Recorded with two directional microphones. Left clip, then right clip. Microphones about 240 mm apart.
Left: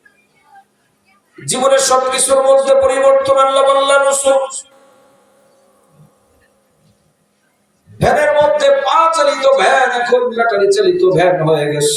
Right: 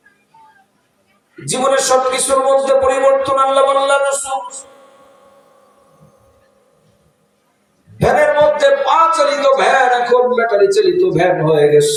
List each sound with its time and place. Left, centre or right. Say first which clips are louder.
1.5 s a man's voice: left 2 dB; left
8.0 s a sound: even; left
10.4 s a man's voice: even; left